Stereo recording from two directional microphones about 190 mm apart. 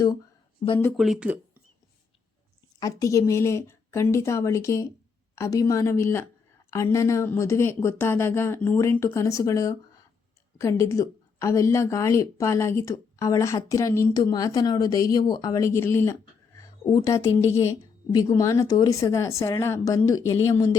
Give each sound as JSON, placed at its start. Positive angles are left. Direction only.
{"t": 0.9, "sound": "speech", "side_deg": 0}
{"t": 2.8, "sound": "a woman's voice", "side_deg": 15}